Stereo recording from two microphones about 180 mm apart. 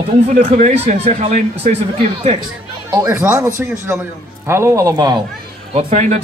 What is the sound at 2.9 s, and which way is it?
A man's voice, 15° right (ahead or behind).